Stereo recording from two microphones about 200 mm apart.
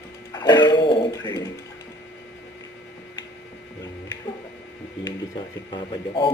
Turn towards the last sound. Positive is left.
turn(degrees=25)  # may be behind; listen again after turning